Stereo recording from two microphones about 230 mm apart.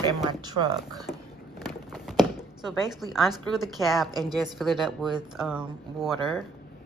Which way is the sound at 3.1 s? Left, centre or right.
Centre.